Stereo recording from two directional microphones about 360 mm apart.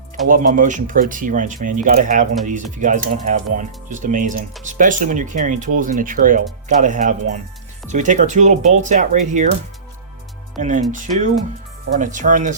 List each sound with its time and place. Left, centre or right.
0.3 s speech: right
10.6 s speech: right